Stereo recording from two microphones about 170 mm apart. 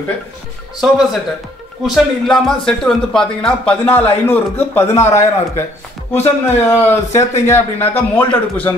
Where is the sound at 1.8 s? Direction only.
Centre (ahead or behind).